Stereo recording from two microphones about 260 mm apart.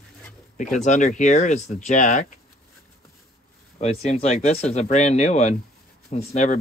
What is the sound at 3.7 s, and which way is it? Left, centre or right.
Speech, left.